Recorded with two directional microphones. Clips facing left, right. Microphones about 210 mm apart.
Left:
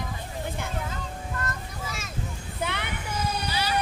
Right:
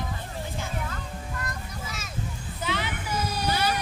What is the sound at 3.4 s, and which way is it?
Music, 50° right (ahead or behind).